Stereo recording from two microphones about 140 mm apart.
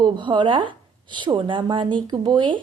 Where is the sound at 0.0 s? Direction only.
35° right (ahead or behind).